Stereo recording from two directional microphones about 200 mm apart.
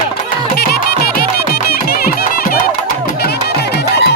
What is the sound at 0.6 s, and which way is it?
Music, 50° left (ahead or behind).